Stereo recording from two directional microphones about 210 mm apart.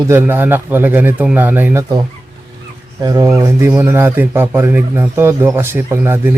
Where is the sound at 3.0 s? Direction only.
15° right (ahead or behind).